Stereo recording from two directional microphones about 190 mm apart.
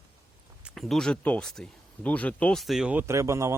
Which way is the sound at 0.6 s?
Centre (ahead or behind).